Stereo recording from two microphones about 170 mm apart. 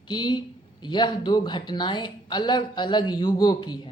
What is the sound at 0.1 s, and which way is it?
Speech, 25° left (ahead or behind).